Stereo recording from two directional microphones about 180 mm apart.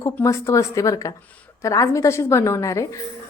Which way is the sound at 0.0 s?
15° left (ahead or behind).